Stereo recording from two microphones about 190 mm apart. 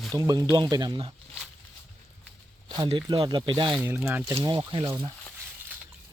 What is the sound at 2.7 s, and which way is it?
Speech, 25° right (ahead or behind).